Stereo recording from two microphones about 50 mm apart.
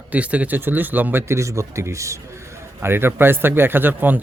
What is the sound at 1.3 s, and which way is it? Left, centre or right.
Speech, right.